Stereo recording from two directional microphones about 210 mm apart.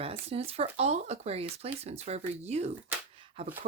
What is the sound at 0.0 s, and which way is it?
Speech, 30° right (ahead or behind).